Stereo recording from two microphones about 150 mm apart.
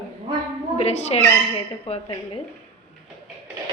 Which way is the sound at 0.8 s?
45° left (ahead or behind).